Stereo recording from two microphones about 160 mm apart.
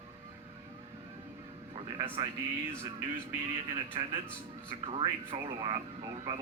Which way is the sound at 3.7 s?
30° right (ahead or behind).